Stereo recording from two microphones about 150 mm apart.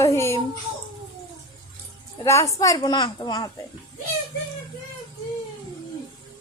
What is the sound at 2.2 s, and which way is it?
A woman's voice, 20° left (ahead or behind).